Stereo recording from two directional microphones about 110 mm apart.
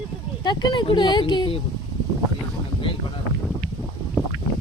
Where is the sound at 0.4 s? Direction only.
40° left (ahead or behind).